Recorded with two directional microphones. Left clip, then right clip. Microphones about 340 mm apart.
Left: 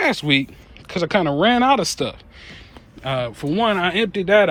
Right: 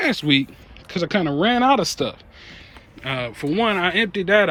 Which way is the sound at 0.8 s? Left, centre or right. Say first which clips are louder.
Left 3 dB; centre.